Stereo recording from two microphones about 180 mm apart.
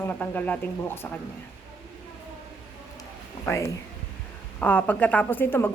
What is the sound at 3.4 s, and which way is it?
Speech, 15° left (ahead or behind).